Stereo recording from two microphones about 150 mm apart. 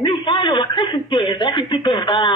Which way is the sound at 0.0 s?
35° left (ahead or behind).